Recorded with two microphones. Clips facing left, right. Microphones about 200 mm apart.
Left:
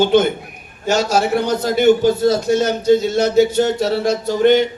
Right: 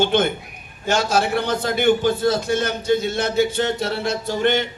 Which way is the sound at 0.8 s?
55° right (ahead or behind).